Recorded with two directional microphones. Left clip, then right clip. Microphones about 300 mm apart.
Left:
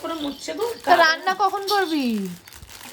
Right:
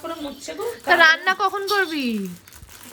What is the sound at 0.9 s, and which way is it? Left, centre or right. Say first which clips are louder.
Speech: right 2 dB; centre.